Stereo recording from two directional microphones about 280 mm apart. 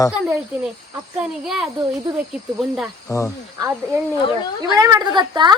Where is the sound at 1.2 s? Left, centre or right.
Centre.